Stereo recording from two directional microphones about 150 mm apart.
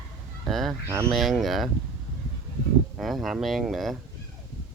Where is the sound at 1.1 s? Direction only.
Centre (ahead or behind).